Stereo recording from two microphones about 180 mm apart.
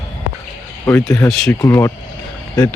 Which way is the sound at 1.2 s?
20° left (ahead or behind).